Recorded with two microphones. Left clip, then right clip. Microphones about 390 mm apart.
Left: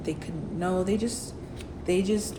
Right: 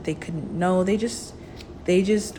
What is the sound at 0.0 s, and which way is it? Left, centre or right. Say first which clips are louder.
Speech: right 4 dB; centre.